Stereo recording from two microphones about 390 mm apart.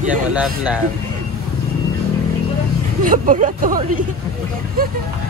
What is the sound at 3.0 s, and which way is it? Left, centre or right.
Speech, centre.